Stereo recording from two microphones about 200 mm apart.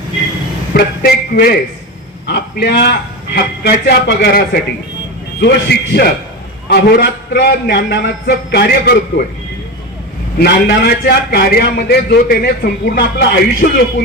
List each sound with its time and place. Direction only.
1.0 s a man's voice: 50° left (ahead or behind)
10.4 s a man's voice: 50° left (ahead or behind)